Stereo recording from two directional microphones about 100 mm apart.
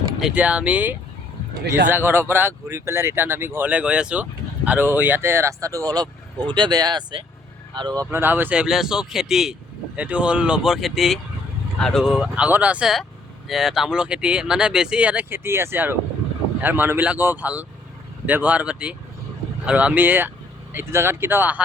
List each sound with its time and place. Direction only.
0.3 s speech: 10° right (ahead or behind)
3.7 s speech: 10° right (ahead or behind); by 8.0 s 50° right (ahead or behind)
8.1 s speech: 20° right (ahead or behind)